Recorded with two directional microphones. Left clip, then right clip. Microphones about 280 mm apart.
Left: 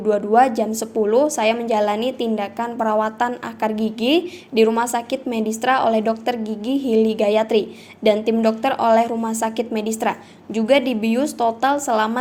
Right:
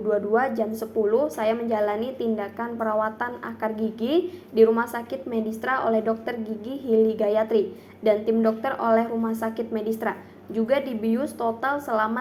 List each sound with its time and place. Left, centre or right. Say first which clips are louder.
0.1 s a woman's voice: left 7 dB; left